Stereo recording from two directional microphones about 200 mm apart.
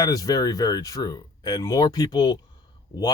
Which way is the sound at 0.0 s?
15° left (ahead or behind).